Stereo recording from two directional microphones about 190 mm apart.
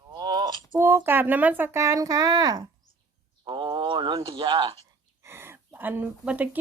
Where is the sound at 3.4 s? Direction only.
25° right (ahead or behind).